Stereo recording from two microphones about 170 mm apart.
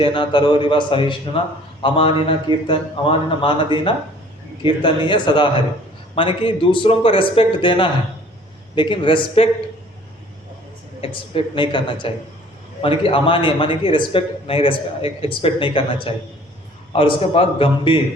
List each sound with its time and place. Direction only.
0.0 s a man's voice: 30° left (ahead or behind)
11.0 s a man's voice: 30° left (ahead or behind)